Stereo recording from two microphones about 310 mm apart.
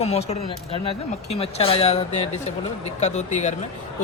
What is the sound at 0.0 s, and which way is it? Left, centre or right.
Speech, centre.